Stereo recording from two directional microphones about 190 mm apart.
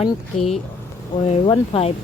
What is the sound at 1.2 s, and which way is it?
Speech, 35° left (ahead or behind).